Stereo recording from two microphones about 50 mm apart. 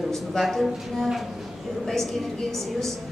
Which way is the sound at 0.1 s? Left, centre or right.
Centre.